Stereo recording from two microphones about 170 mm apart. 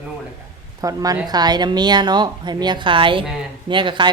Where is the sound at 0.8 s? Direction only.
20° right (ahead or behind).